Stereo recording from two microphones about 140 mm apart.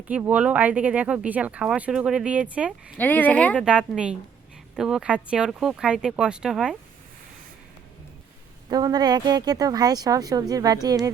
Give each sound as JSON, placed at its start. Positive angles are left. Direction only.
{"t": 0.1, "sound": "speech", "side_deg": -10}
{"t": 3.0, "sound": "speech", "side_deg": 10}
{"t": 3.6, "sound": "speech", "side_deg": -5}
{"t": 8.7, "sound": "speech", "side_deg": -30}